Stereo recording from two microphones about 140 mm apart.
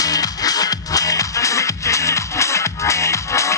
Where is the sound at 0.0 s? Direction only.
25° left (ahead or behind).